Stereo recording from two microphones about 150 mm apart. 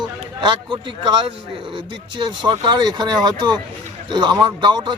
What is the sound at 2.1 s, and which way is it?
A man's voice, 30° right (ahead or behind).